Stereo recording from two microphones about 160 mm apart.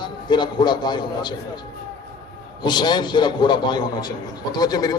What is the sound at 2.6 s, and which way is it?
A man's voice, 25° left (ahead or behind).